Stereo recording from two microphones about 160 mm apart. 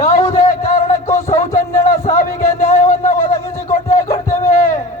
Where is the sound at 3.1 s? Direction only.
15° left (ahead or behind).